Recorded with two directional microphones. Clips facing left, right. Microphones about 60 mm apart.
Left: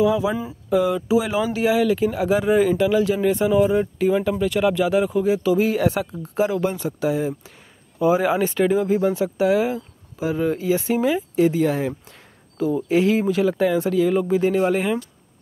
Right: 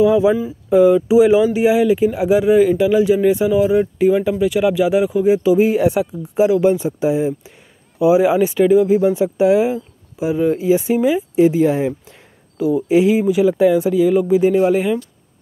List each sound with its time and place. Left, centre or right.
0.0 s speech: right; by 2.8 s centre
2.8 s speech: centre
9.1 s speech: right; by 15.0 s centre